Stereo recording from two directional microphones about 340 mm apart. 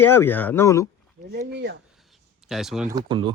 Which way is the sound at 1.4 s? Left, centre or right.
Right.